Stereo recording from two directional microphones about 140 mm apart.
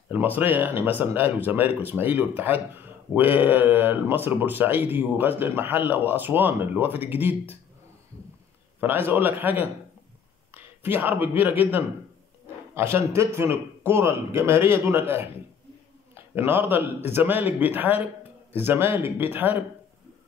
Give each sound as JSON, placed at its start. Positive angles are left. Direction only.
{"t": 0.1, "sound": "speech", "side_deg": -15}
{"t": 8.8, "sound": "speech", "side_deg": -15}